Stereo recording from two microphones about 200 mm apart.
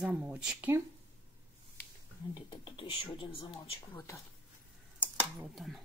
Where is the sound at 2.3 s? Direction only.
25° left (ahead or behind).